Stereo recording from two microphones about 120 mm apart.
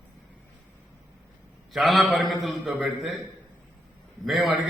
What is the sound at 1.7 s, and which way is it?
A man's voice, centre (ahead or behind).